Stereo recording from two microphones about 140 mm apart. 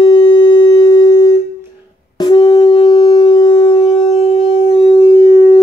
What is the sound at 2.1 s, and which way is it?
Wind instrument, 30° left (ahead or behind).